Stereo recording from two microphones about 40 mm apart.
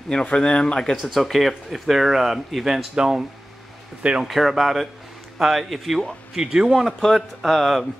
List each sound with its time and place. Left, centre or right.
0.4 s speech: left
1.0 s speech: centre
4.2 s speech: centre
6.3 s speech: centre
6.7 s speech: centre